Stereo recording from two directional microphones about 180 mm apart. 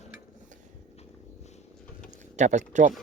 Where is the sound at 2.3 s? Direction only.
40° right (ahead or behind).